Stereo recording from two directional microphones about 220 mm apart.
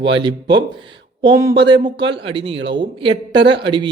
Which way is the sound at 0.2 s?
20° right (ahead or behind).